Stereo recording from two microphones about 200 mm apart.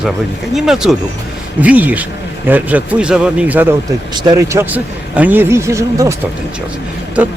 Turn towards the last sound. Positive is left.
turn(degrees=-5)  # may be behind; listen again after turning